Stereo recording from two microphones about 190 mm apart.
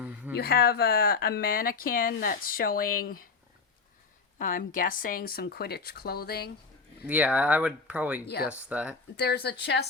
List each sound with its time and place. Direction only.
0.0 s a sound: 10° right (ahead or behind)
0.3 s speech: 55° left (ahead or behind)
4.4 s speech: 45° left (ahead or behind)
7.1 s speech: 10° right (ahead or behind)
9.1 s speech: 60° left (ahead or behind)